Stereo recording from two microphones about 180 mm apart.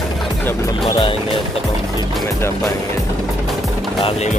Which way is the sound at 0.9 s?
30° left (ahead or behind).